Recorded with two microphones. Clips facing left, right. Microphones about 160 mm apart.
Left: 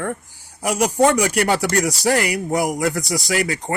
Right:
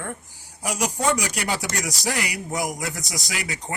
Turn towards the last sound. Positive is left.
turn(degrees=55)  # may be behind; listen again after turning